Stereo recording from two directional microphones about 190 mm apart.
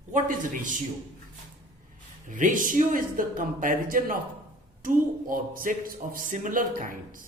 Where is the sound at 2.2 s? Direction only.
40° right (ahead or behind).